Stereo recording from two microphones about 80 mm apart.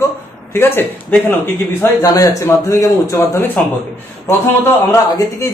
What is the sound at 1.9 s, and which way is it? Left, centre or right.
A man's voice, left.